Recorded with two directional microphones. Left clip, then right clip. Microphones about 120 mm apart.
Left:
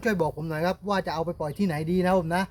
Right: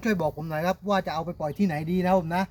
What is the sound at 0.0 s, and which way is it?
Speech, 15° left (ahead or behind).